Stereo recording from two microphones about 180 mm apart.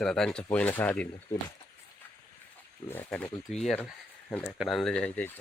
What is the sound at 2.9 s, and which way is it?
Speech, 10° left (ahead or behind).